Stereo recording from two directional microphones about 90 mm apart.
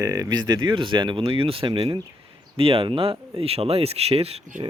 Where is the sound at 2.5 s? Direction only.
90° right.